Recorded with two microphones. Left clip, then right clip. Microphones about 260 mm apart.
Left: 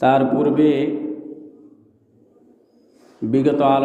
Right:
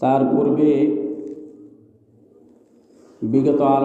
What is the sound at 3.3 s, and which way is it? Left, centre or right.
Speech, left.